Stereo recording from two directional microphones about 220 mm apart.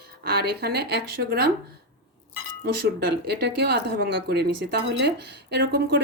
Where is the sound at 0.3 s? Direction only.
45° right (ahead or behind).